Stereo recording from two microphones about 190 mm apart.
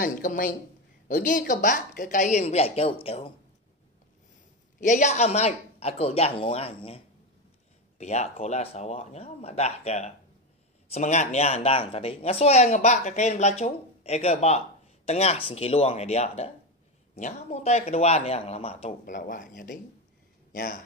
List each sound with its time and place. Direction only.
0.0 s a woman's voice: 45° left (ahead or behind)
4.7 s speech: 40° left (ahead or behind)
8.0 s a woman's voice: 35° left (ahead or behind); by 20.8 s 50° left (ahead or behind)